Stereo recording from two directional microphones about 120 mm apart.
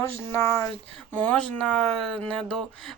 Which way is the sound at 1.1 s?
10° left (ahead or behind).